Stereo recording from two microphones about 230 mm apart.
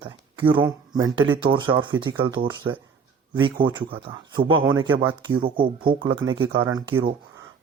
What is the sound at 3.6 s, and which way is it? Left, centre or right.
Speech, right.